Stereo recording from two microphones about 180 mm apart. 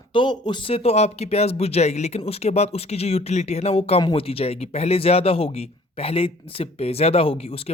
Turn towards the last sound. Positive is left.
turn(degrees=35)  # may be behind; listen again after turning